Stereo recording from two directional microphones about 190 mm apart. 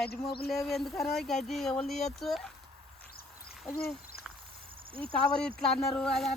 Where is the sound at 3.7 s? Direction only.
55° left (ahead or behind).